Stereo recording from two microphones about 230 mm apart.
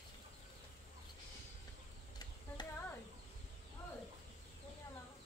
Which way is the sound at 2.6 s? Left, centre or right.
Centre.